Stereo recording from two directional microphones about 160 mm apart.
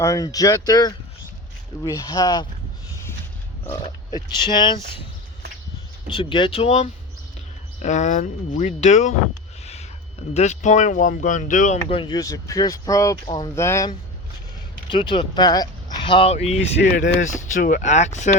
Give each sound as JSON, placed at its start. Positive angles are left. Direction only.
{"t": 0.0, "sound": "speech", "side_deg": 20}
{"t": 3.7, "sound": "speech", "side_deg": 25}
{"t": 6.1, "sound": "speech", "side_deg": 30}
{"t": 7.8, "sound": "speech", "side_deg": 50}
{"t": 10.3, "sound": "speech", "side_deg": 45}
{"t": 11.9, "sound": "speech", "side_deg": 30}
{"t": 13.2, "sound": "speech", "side_deg": 35}
{"t": 13.6, "sound": "speech", "side_deg": 15}
{"t": 14.8, "sound": "speech", "side_deg": 30}
{"t": 16.8, "sound": "speech", "side_deg": 90}
{"t": 17.2, "sound": "speech", "side_deg": 50}